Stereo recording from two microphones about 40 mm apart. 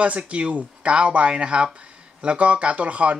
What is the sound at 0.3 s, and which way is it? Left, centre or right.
Speech, right.